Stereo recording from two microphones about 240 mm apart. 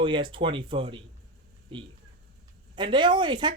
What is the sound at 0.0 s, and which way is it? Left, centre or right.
Speech, centre.